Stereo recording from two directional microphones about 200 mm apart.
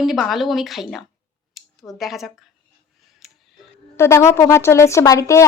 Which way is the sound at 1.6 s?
Centre (ahead or behind).